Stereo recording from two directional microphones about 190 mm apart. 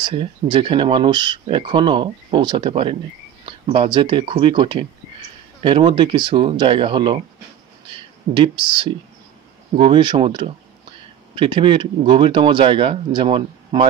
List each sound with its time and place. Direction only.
0.0 s speech: 25° right (ahead or behind)